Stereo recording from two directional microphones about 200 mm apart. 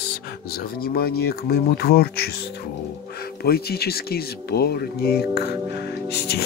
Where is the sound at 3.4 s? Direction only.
50° left (ahead or behind).